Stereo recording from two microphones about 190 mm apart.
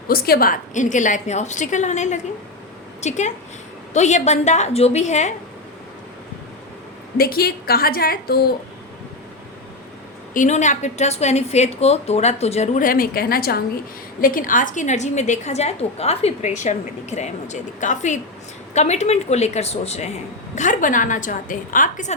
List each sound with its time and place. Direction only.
0.1 s a woman's voice: 50° left (ahead or behind)
7.2 s a woman's voice: 50° left (ahead or behind)
10.3 s a woman's voice: 40° left (ahead or behind)